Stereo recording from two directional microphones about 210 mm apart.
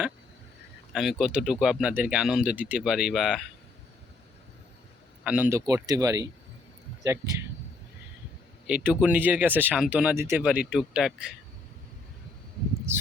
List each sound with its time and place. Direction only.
0.9 s speech: centre (ahead or behind)
5.2 s speech: 5° right (ahead or behind)
8.6 s speech: 5° right (ahead or behind)